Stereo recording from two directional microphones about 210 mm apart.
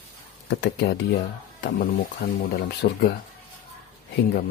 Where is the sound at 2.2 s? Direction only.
60° left (ahead or behind).